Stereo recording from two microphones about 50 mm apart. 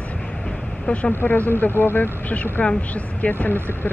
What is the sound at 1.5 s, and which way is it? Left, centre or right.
Speech, left.